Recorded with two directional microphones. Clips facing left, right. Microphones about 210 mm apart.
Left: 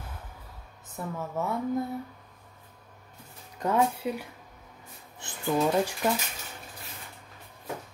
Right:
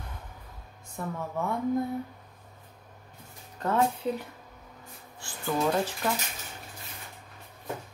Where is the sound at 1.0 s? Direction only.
5° left (ahead or behind).